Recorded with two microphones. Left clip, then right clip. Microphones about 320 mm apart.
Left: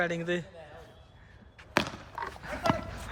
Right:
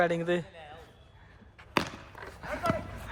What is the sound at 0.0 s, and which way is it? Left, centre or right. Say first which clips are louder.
Speech: right 3 dB; centre.